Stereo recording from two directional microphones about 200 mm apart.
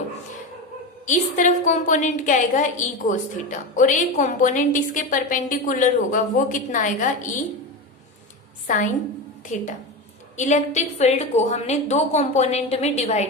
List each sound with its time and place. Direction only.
1.0 s a woman's voice: 40° left (ahead or behind)
8.6 s a woman's voice: 40° left (ahead or behind)